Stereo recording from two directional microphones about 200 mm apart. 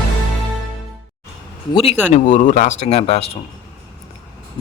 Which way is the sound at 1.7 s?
30° left (ahead or behind).